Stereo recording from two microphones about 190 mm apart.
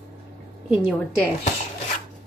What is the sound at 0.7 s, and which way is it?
Speech, 5° right (ahead or behind).